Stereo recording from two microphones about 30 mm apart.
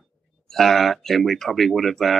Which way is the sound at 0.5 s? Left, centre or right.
Centre.